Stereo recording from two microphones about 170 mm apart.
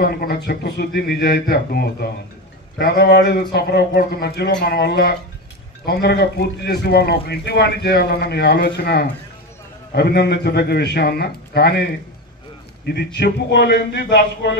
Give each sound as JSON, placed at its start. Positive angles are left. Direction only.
{"t": 0.0, "sound": "a man's voice", "side_deg": 65}